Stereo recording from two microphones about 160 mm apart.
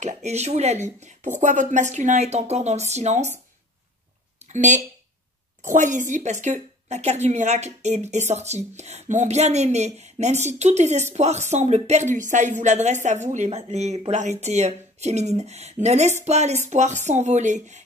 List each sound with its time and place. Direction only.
0.0 s a woman's voice: 45° right (ahead or behind)
4.5 s a woman's voice: 50° right (ahead or behind)